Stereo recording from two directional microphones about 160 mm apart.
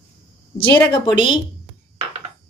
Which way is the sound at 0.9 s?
30° left (ahead or behind).